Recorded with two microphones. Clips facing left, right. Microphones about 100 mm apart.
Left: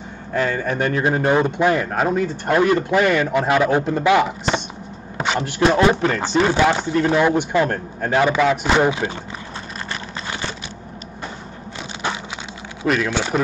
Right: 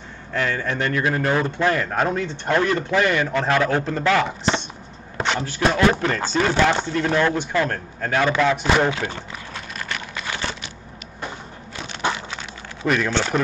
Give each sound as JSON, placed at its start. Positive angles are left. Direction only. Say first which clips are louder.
{"t": 0.3, "sound": "a man's voice", "louder": "left 3 dB", "side_deg": 35}
{"t": 0.7, "sound": "speech", "louder": "left 3 dB", "side_deg": 25}
{"t": 5.1, "sound": "chopping", "louder": "left 2 dB", "side_deg": 5}
{"t": 5.8, "sound": "speech", "louder": "left 2 dB", "side_deg": 15}
{"t": 9.8, "sound": "a sound", "louder": "left 1 dB", "side_deg": 30}
{"t": 12.8, "sound": "a man's voice", "louder": "left 1 dB", "side_deg": 5}